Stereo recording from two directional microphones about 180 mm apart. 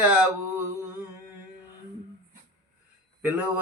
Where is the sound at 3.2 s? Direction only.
10° right (ahead or behind).